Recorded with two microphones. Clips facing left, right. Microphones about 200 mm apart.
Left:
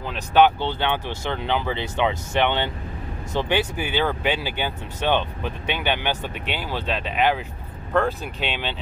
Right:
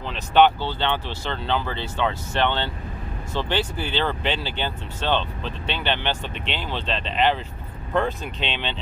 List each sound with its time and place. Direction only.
0.1 s speech: 10° left (ahead or behind)